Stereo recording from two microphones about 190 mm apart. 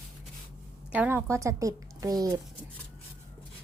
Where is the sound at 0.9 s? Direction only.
10° right (ahead or behind).